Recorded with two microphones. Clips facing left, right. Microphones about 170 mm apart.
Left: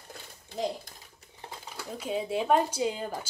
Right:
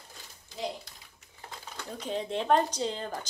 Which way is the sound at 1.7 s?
5° left (ahead or behind).